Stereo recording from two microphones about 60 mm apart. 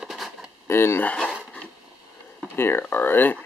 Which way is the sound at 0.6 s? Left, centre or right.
Left.